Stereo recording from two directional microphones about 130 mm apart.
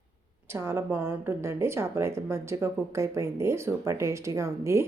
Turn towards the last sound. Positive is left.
turn(degrees=-20)  # may be behind; listen again after turning